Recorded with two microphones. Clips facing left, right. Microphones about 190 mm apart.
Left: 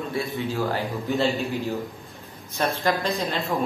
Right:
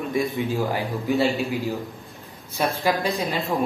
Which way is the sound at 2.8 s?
15° right (ahead or behind).